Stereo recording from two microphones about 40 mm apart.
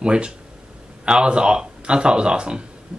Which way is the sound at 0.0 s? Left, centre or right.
Right.